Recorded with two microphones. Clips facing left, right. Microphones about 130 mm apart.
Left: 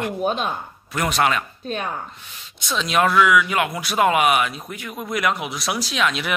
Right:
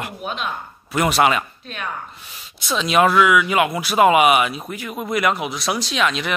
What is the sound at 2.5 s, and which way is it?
Speech, 5° right (ahead or behind).